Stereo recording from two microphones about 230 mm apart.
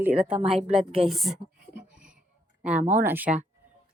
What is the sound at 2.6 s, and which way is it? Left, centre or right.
Speech, centre.